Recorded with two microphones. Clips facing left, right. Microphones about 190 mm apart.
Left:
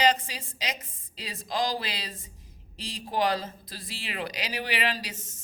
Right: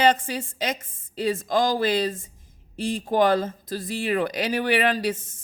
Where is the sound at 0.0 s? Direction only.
50° right (ahead or behind).